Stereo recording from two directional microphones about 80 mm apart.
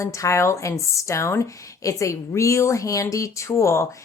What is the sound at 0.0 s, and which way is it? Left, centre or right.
Speech, left.